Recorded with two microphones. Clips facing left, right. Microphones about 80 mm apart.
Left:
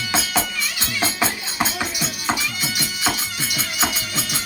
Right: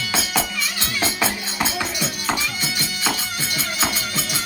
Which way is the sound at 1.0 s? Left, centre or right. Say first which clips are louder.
Even; left.